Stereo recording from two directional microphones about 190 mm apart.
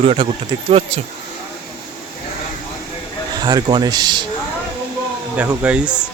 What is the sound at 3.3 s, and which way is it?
Speech, 20° right (ahead or behind).